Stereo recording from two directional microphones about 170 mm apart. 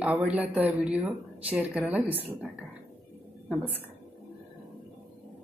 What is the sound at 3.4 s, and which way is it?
Speech, 10° right (ahead or behind).